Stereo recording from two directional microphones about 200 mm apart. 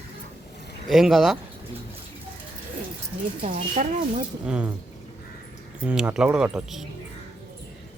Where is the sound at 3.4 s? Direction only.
40° right (ahead or behind).